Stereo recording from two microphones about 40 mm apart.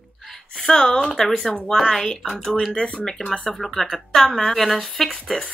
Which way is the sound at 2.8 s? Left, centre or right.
Left.